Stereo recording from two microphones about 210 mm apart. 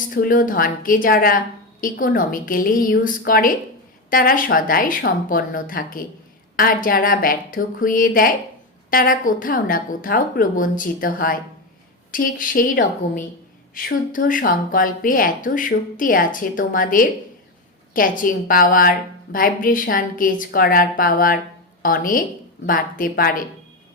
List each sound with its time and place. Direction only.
0.1 s a woman's voice: 40° left (ahead or behind)